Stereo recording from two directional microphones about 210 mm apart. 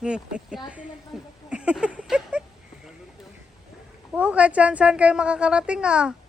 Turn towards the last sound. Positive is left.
turn(degrees=-5)  # may be behind; listen again after turning